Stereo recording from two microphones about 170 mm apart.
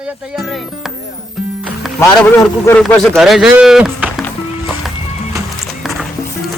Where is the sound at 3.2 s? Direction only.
Centre (ahead or behind).